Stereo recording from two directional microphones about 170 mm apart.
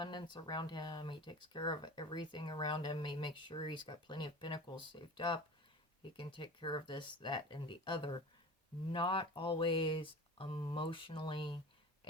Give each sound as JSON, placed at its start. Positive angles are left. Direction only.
{"t": 0.0, "sound": "speech", "side_deg": 25}